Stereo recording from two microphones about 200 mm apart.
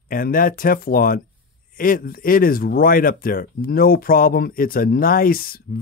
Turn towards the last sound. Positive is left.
turn(degrees=45)  # may be behind; listen again after turning